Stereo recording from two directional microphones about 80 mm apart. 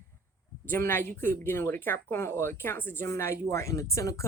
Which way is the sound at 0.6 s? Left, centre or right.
Left.